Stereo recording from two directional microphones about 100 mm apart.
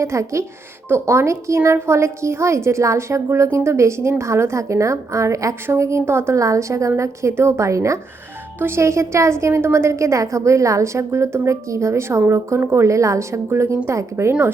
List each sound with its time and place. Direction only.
0.0 s a woman's voice: 30° right (ahead or behind)